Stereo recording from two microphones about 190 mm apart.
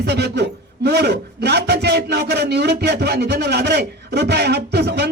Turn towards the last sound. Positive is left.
turn(degrees=-60)  # may be behind; listen again after turning